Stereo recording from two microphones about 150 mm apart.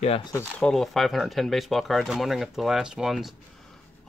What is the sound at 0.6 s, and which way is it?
Speech, 5° left (ahead or behind).